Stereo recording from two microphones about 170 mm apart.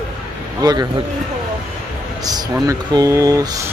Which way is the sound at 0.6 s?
25° right (ahead or behind).